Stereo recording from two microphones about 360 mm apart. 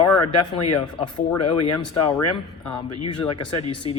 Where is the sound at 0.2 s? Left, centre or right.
Left.